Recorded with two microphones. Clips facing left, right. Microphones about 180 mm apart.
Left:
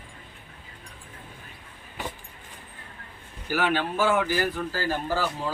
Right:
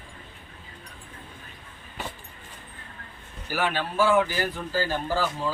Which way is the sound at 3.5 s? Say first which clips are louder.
Left 1 dB; 15° left (ahead or behind).